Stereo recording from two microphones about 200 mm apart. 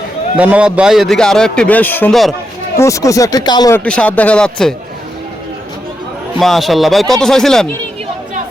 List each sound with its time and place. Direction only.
0.3 s a man's voice: 5° right (ahead or behind)
2.7 s speech: 15° left (ahead or behind)
3.8 s a man's voice: 5° left (ahead or behind)
6.4 s a man's voice: centre (ahead or behind)